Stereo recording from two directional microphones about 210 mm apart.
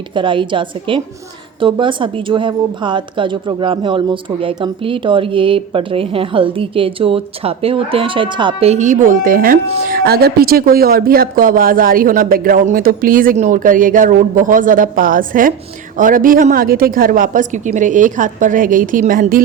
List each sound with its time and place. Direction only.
0.1 s a woman's voice: 25° right (ahead or behind); by 19.4 s 40° right (ahead or behind)